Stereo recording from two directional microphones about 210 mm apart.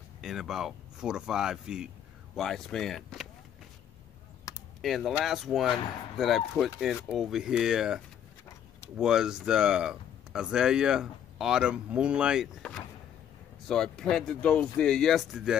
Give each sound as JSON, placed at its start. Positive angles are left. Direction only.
{"t": 0.2, "sound": "speech", "side_deg": 0}
{"t": 4.5, "sound": "typing", "side_deg": 20}
{"t": 4.8, "sound": "speech", "side_deg": 0}